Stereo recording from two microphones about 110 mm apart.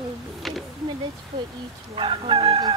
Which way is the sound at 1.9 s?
55° right (ahead or behind).